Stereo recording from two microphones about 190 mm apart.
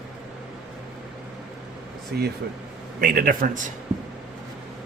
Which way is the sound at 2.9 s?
50° right (ahead or behind).